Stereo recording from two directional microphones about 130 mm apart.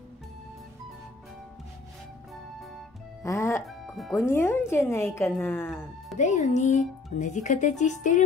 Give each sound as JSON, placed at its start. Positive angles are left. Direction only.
{"t": 3.3, "sound": "a woman's voice", "side_deg": 20}
{"t": 3.6, "sound": "music", "side_deg": 0}
{"t": 4.3, "sound": "a woman's voice", "side_deg": 20}
{"t": 6.1, "sound": "speech", "side_deg": 65}